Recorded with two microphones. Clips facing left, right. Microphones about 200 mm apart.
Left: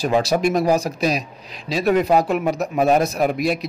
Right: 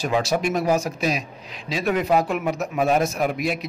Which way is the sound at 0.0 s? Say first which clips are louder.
Left 4 dB; 35° left (ahead or behind).